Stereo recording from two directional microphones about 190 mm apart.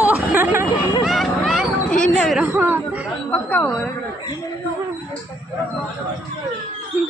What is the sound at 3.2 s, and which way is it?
Speech, 5° left (ahead or behind).